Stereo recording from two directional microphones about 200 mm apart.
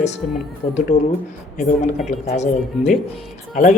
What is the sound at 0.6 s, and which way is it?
Speech, 35° left (ahead or behind).